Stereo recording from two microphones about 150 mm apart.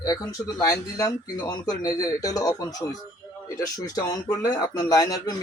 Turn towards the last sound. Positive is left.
turn(degrees=25)  # may be behind; listen again after turning